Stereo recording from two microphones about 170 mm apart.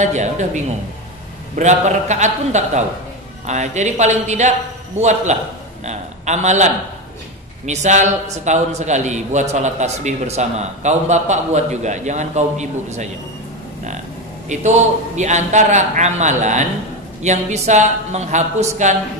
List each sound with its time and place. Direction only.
0.0 s a man's voice: 45° right (ahead or behind)
1.6 s a man's voice: 45° right (ahead or behind)
14.5 s a man's voice: 45° right (ahead or behind)